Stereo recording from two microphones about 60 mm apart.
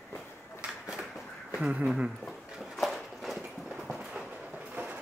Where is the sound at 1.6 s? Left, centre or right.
Right.